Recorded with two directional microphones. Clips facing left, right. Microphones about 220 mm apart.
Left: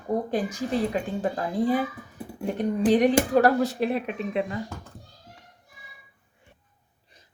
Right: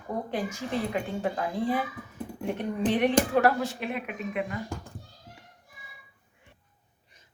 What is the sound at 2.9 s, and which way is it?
Speech, 40° left (ahead or behind).